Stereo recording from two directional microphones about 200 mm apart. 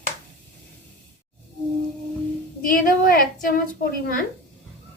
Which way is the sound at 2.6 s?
45° left (ahead or behind).